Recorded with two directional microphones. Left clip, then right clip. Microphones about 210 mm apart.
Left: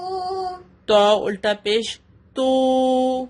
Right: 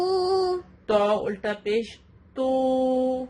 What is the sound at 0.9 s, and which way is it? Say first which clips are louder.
Speech: left 7 dB; 50° left (ahead or behind).